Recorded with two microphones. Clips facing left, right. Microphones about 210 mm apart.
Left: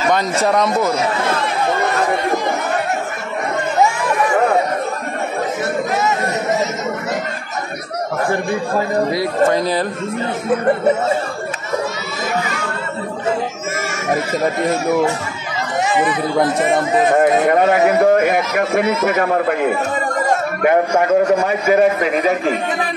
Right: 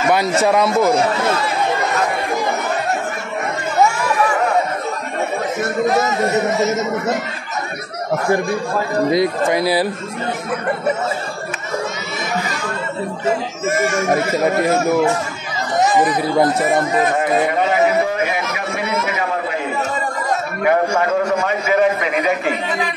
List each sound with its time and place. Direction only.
0.4 s speech: 5° right (ahead or behind)
9.1 s speech: 15° right (ahead or behind)
15.8 s chatter: 40° right (ahead or behind)
17.1 s a man's voice: 50° left (ahead or behind)